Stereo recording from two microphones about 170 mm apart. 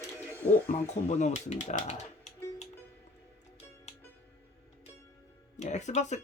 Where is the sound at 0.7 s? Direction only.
40° left (ahead or behind).